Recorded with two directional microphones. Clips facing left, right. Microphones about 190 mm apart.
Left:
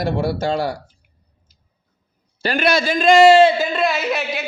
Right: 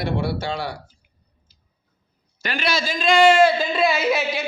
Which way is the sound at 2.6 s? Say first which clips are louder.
Left 6 dB; 55° left (ahead or behind).